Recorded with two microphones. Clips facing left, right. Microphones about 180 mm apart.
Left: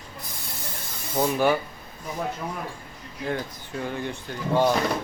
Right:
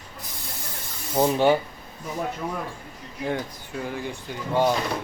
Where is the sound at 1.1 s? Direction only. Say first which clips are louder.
Right 3 dB; 25° right (ahead or behind).